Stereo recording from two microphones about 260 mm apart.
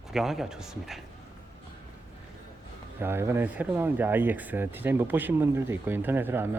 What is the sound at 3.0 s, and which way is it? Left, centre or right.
Speech, centre.